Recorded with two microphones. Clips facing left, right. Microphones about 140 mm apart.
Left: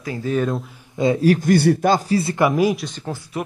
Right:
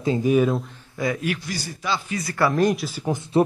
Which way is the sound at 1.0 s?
25° left (ahead or behind).